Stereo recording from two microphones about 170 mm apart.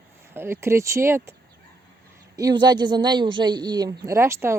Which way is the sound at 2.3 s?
25° right (ahead or behind).